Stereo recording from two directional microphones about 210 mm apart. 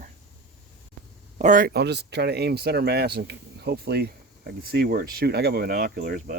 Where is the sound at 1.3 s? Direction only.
35° right (ahead or behind).